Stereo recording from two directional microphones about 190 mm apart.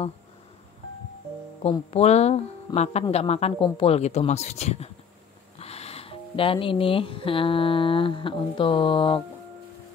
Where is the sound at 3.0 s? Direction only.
35° left (ahead or behind).